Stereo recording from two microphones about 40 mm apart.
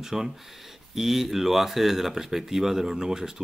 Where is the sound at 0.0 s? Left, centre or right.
Centre.